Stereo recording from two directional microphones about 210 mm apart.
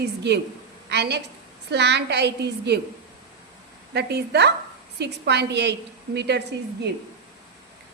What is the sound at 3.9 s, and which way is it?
A woman's voice, 55° right (ahead or behind).